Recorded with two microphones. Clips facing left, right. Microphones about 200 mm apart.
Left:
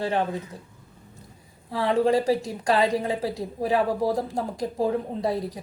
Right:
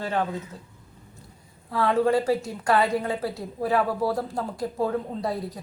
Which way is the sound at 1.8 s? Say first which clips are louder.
Even; 20° left (ahead or behind).